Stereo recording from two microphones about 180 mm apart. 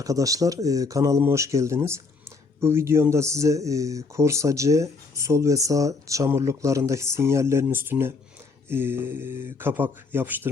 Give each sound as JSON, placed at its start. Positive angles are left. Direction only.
{"t": 0.0, "sound": "speech", "side_deg": -20}